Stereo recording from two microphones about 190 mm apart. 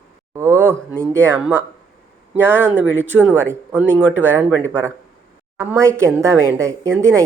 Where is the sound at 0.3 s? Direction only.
15° right (ahead or behind).